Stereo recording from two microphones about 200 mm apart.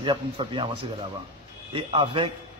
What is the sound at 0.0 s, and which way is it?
Speech, 25° right (ahead or behind).